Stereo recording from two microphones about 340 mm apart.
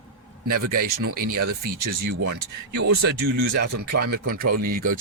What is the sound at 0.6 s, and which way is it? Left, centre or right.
Speech, right.